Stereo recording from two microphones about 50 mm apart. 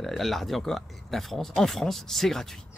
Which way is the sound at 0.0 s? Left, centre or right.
Centre.